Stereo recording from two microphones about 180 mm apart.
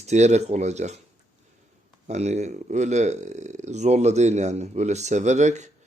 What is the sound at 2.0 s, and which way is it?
Speech, 40° right (ahead or behind).